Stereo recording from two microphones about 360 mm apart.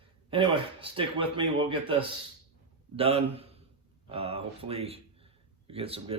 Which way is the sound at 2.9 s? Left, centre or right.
Centre.